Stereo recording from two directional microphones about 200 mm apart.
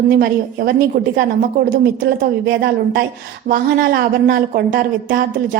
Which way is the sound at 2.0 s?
55° right (ahead or behind).